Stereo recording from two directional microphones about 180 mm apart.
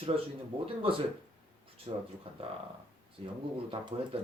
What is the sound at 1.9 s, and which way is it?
Speech, 30° right (ahead or behind).